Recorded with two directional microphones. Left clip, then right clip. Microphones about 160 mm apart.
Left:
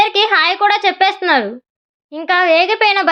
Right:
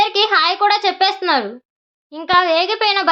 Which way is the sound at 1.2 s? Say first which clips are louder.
Left 3 dB; 15° left (ahead or behind).